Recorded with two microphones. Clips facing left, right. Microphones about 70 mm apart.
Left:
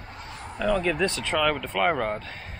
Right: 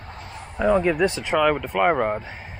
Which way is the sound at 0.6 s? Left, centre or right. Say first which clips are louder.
Right 5 dB; right.